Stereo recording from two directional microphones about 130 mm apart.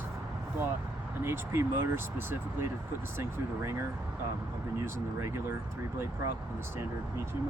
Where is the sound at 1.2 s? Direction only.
20° right (ahead or behind).